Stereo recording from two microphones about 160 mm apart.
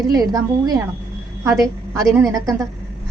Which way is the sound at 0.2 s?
25° right (ahead or behind).